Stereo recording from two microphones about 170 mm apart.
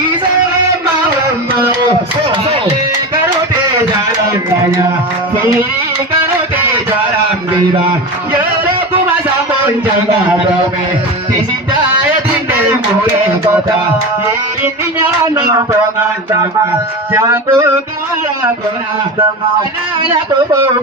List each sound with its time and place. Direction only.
14.6 s music: 15° right (ahead or behind)
17.1 s music: 15° right (ahead or behind)